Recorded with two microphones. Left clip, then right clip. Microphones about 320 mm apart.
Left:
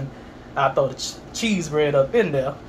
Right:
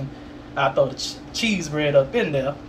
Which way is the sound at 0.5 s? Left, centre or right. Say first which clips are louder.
Even; centre.